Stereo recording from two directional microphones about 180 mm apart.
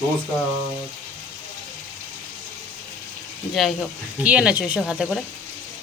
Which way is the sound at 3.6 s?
Centre (ahead or behind).